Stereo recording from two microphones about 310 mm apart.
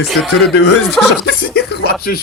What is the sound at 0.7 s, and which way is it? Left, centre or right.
Speech, centre.